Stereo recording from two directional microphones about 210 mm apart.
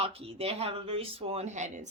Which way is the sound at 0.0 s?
30° right (ahead or behind).